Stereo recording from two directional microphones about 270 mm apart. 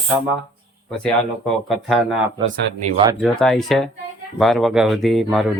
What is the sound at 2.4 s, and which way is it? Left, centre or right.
Speech, right.